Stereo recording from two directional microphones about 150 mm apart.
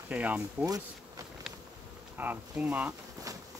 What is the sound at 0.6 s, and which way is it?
Speech, 25° right (ahead or behind).